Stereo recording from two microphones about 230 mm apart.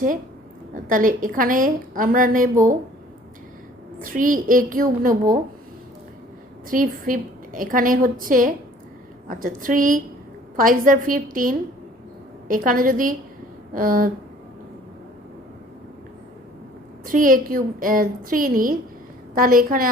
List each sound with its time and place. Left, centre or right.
0.9 s a woman's voice: right
4.0 s a woman's voice: right
6.7 s a woman's voice: right
17.1 s a woman's voice: right